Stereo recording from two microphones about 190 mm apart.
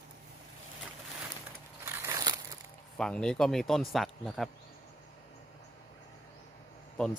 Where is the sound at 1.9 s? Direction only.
15° right (ahead or behind).